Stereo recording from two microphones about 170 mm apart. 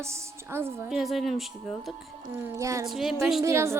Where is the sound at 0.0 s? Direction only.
15° right (ahead or behind).